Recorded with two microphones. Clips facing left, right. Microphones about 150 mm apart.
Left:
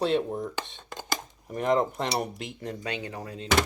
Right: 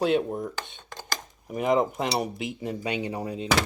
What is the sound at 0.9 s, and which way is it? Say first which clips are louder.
Cutlery: left 3 dB; 20° left (ahead or behind).